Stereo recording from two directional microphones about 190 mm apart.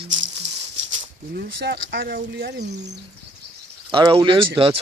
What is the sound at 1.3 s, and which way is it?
Speech, 55° right (ahead or behind).